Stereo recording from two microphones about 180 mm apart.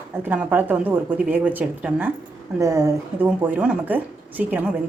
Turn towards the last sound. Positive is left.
turn(degrees=-10)  # may be behind; listen again after turning